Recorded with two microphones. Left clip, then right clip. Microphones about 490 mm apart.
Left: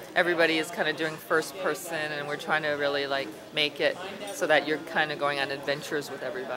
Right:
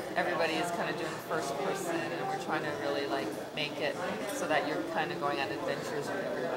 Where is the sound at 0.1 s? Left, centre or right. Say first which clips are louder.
Left 8 dB; left.